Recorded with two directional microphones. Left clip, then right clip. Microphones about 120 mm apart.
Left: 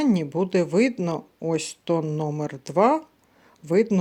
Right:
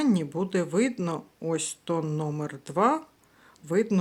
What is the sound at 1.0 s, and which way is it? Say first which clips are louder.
Speech: left 4 dB; 15° left (ahead or behind).